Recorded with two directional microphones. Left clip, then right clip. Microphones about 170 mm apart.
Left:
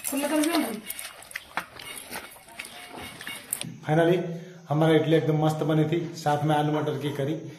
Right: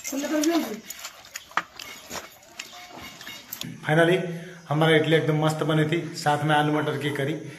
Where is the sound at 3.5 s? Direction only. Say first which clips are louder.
Right 3 dB; 5° left (ahead or behind).